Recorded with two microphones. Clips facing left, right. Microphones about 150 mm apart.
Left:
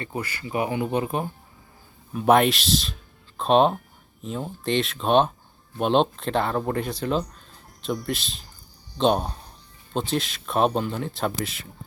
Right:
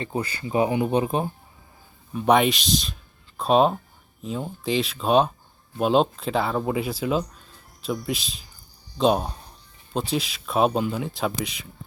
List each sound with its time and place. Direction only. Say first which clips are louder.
0.0 s speech: right 3 dB; 25° right (ahead or behind)
2.1 s speech: left 1 dB; centre (ahead or behind)